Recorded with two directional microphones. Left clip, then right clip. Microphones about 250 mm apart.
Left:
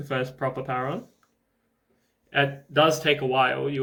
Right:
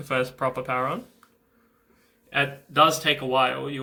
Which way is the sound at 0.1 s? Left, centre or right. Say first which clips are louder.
Right 3 dB; centre.